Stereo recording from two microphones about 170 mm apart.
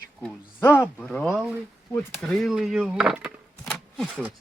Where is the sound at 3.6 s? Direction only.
5° left (ahead or behind).